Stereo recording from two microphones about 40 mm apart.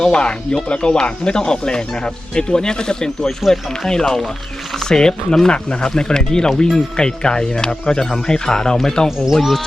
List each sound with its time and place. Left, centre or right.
0.0 s speech: left
9.0 s speech: centre
9.3 s speech: centre